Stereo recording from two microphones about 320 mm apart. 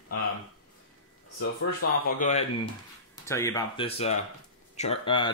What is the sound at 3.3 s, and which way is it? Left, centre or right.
Speech, centre.